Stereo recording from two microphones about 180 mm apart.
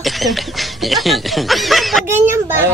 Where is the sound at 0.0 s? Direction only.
Centre (ahead or behind).